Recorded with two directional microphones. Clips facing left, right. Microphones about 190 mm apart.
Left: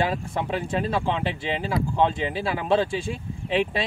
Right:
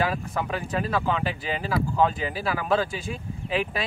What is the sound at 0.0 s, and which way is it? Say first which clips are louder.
Speech: left 1 dB; 30° left (ahead or behind).